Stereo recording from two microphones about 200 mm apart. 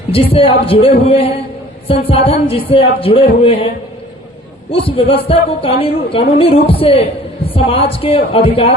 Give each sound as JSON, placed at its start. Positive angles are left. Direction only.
{"t": 0.1, "sound": "speech", "side_deg": 30}
{"t": 4.7, "sound": "speech", "side_deg": 25}